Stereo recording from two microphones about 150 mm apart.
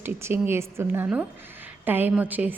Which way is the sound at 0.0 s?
15° right (ahead or behind).